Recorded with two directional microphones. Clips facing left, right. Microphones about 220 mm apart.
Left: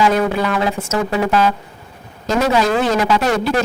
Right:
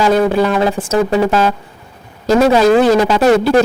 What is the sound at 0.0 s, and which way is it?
A man's voice, 30° right (ahead or behind).